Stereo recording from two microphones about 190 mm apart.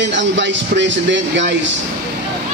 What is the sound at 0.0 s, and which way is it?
A man's voice, 70° right (ahead or behind).